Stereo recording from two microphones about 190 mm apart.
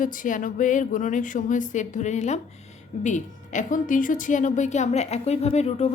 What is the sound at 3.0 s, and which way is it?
A woman's voice, 40° left (ahead or behind).